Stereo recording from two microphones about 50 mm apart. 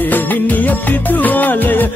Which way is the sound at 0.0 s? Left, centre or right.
Left.